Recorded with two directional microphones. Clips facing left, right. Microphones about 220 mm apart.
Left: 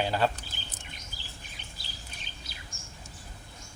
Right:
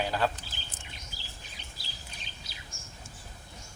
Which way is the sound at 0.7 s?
50° left (ahead or behind).